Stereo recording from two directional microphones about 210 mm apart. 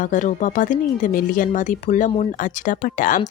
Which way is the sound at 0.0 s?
35° left (ahead or behind).